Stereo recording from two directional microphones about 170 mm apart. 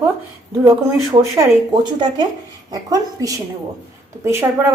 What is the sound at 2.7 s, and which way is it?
A woman's voice, 20° right (ahead or behind).